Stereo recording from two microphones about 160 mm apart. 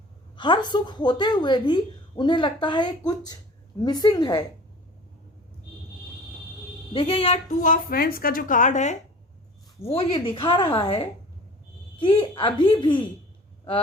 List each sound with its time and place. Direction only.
0.3 s a woman's voice: 30° left (ahead or behind)
6.9 s a woman's voice: 35° left (ahead or behind)
7.6 s a woman's voice: 60° left (ahead or behind)
9.8 s a woman's voice: 35° left (ahead or behind)